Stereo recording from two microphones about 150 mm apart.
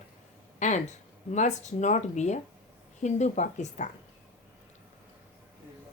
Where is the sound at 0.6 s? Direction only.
55° left (ahead or behind).